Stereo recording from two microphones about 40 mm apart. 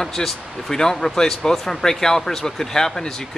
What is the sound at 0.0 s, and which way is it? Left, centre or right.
Speech, centre.